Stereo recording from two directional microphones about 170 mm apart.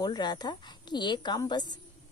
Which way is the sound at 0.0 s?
25° left (ahead or behind).